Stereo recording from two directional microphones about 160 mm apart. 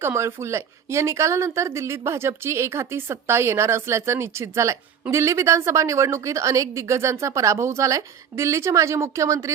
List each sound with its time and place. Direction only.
0.0 s a woman's voice: 15° right (ahead or behind)